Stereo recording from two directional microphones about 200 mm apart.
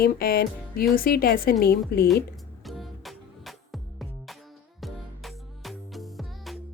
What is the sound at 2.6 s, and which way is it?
Music, centre (ahead or behind).